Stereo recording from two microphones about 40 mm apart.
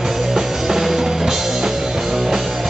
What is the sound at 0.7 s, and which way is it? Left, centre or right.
Music, centre.